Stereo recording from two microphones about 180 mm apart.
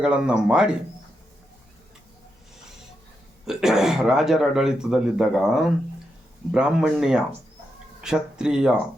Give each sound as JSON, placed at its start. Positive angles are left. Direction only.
{"t": 0.0, "sound": "a man's voice", "side_deg": -5}
{"t": 3.4, "sound": "a man's voice", "side_deg": 0}